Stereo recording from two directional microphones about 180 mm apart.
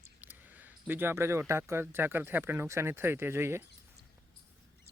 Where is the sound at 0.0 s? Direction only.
10° right (ahead or behind).